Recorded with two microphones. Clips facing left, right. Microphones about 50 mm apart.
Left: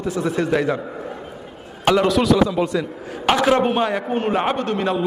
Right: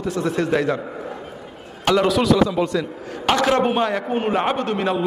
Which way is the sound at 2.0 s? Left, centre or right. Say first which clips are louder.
Right 1 dB; centre.